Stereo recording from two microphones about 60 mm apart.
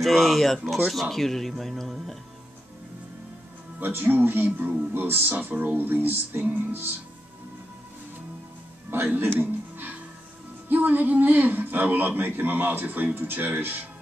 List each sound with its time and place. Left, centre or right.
0.0 s speech: centre
3.8 s speech: right
4.5 s speech: right
4.9 s speech: right
9.0 s speech: right
9.4 s music: right
10.7 s speech: right